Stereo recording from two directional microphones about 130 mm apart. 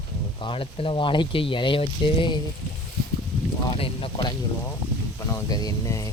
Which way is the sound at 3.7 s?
45° left (ahead or behind).